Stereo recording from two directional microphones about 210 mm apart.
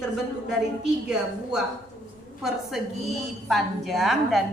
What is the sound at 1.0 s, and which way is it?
A woman's voice, 5° right (ahead or behind).